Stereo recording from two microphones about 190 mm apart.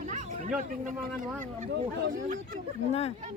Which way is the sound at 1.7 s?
60° right (ahead or behind).